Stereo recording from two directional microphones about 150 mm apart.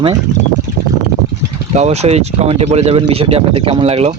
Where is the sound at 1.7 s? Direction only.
45° right (ahead or behind).